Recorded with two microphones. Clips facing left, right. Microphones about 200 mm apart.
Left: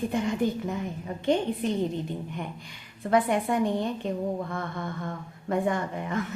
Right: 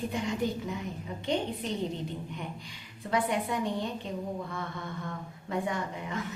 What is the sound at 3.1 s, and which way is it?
Speech, 55° left (ahead or behind).